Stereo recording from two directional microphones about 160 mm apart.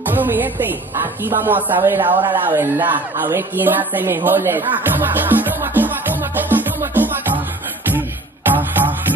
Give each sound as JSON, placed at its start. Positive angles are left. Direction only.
{"t": 0.0, "sound": "a woman's voice", "side_deg": -10}
{"t": 2.0, "sound": "speech", "side_deg": -35}
{"t": 2.3, "sound": "speech", "side_deg": -15}
{"t": 8.5, "sound": "music", "side_deg": -10}